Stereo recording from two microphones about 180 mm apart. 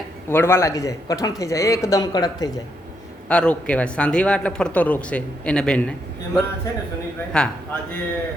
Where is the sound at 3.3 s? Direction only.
5° left (ahead or behind).